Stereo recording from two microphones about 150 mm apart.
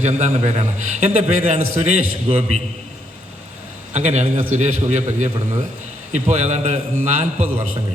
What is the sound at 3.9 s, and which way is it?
A man's voice, 50° right (ahead or behind).